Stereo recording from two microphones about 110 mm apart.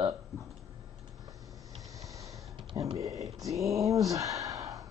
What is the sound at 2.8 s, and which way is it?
Speech, 30° right (ahead or behind).